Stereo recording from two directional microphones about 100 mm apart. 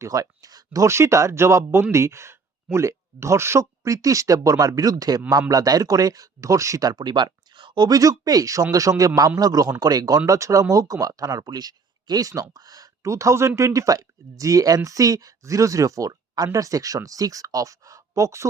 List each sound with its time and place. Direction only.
0.0 s speech: 35° right (ahead or behind); by 7.9 s 55° right (ahead or behind)
7.9 s speech: 35° right (ahead or behind)